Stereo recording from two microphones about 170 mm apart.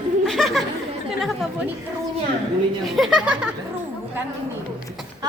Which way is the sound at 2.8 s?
Centre (ahead or behind).